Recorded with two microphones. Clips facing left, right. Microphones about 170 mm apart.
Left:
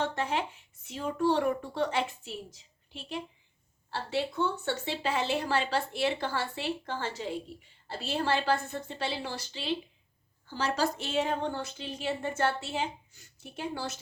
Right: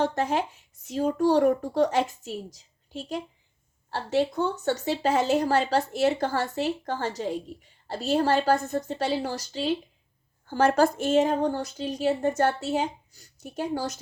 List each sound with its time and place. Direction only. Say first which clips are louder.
0.0 s speech: right 6 dB; 40° right (ahead or behind)
10.4 s speech: right 9 dB; 50° right (ahead or behind)